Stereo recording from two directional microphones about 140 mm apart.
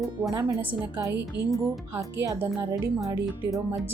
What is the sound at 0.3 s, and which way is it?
A woman's voice, 15° right (ahead or behind).